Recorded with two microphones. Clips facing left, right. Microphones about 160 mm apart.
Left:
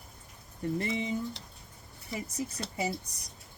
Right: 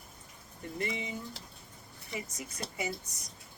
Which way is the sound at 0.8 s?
35° left (ahead or behind).